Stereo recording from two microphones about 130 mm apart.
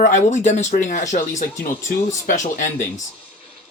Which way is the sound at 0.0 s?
65° left (ahead or behind).